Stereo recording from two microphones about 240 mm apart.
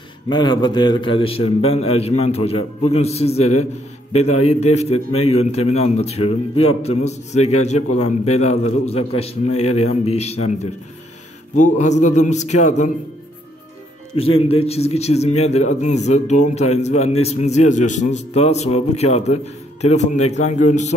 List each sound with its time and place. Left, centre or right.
0.3 s a man's voice: centre
11.8 s a man's voice: left
14.1 s a man's voice: left